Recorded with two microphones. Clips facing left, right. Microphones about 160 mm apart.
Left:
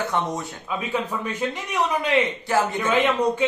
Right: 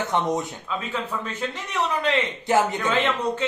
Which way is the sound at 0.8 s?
15° left (ahead or behind).